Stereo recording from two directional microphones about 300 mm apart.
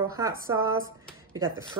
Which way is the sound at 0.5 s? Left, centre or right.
Right.